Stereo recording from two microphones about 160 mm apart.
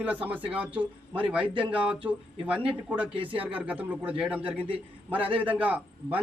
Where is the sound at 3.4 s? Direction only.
10° right (ahead or behind).